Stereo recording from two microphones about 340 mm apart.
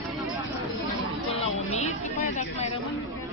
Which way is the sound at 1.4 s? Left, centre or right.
Centre.